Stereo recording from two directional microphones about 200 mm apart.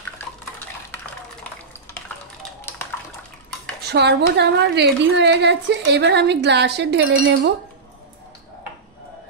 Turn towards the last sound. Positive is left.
turn(degrees=-60)  # may be behind; listen again after turning